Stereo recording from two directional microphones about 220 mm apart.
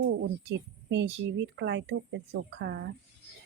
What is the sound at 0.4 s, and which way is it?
Speech, 55° right (ahead or behind).